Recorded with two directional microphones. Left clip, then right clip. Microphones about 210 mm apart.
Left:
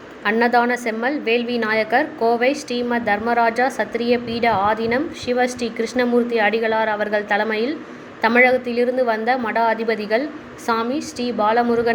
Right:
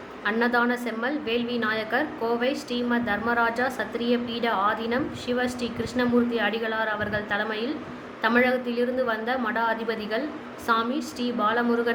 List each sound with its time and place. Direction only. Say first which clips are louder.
0.3 s a woman's voice: left 7 dB; 25° left (ahead or behind)